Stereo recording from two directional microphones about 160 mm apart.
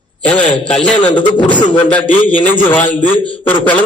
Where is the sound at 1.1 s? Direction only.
30° left (ahead or behind).